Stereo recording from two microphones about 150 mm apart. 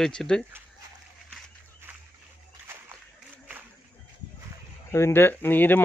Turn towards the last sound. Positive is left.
turn(degrees=15)  # may be behind; listen again after turning